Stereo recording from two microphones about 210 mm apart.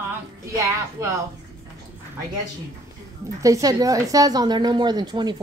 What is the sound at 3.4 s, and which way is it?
A woman's voice, 15° right (ahead or behind).